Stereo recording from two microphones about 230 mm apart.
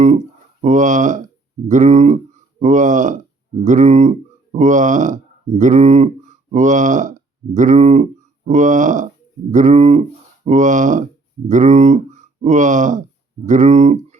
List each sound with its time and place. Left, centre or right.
0.6 s speech: right